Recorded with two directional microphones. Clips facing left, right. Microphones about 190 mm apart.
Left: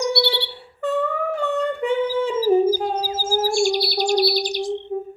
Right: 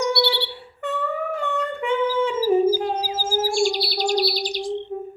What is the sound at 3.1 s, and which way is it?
Chirp, 45° left (ahead or behind).